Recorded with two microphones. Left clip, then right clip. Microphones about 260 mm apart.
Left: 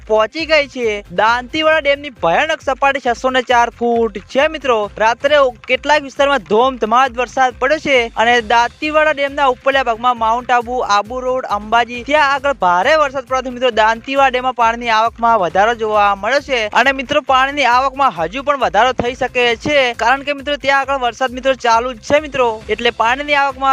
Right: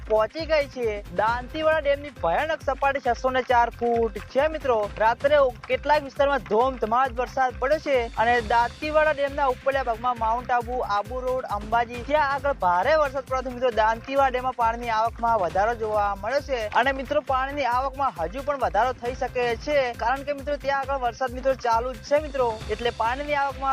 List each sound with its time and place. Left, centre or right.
0.1 s speech: left